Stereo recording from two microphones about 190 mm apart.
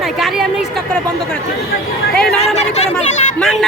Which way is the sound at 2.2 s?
5° left (ahead or behind).